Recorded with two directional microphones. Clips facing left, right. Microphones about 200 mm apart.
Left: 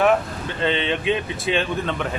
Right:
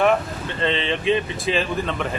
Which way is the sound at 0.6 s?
Centre (ahead or behind).